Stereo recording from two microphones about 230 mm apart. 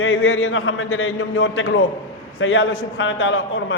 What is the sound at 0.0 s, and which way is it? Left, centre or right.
A man's voice, left.